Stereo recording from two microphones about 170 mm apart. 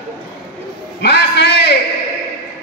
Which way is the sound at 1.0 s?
85° left.